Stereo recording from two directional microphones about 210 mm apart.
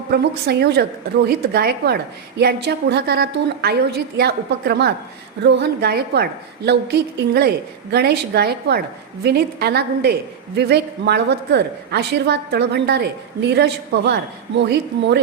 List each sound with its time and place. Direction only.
0.1 s a woman's voice: 50° right (ahead or behind)